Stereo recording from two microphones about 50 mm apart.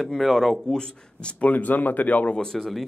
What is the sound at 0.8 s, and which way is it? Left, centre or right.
Speech, left.